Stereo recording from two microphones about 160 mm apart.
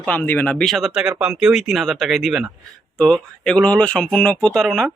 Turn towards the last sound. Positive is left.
turn(degrees=0)  # may be behind; listen again after turning